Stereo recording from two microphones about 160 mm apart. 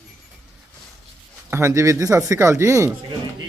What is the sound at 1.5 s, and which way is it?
Speech, 15° right (ahead or behind).